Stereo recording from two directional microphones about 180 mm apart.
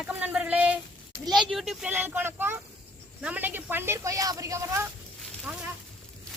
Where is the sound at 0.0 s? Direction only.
5° right (ahead or behind).